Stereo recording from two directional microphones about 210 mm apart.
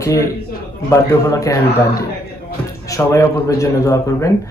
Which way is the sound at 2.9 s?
15° left (ahead or behind).